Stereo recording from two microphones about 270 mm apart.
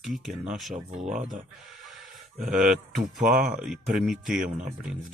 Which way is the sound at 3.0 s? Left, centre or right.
Right.